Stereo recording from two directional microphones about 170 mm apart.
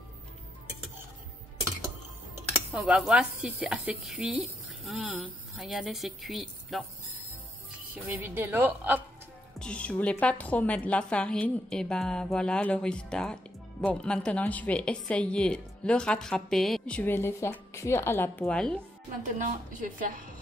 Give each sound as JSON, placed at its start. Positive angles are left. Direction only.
{"t": 2.7, "sound": "a woman's voice", "side_deg": 0}
{"t": 7.9, "sound": "a woman's voice", "side_deg": -10}
{"t": 9.6, "sound": "a woman's voice", "side_deg": 5}
{"t": 19.3, "sound": "a woman's voice", "side_deg": -50}